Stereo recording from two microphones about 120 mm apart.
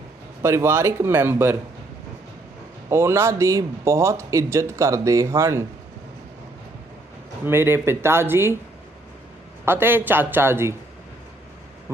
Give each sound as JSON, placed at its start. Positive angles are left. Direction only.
{"t": 0.4, "sound": "a man's voice", "side_deg": -20}
{"t": 2.9, "sound": "a man's voice", "side_deg": -20}
{"t": 7.4, "sound": "a man's voice", "side_deg": -20}
{"t": 9.6, "sound": "a man's voice", "side_deg": -20}